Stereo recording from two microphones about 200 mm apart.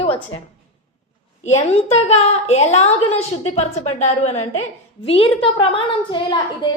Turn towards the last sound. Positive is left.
turn(degrees=25)  # may be behind; listen again after turning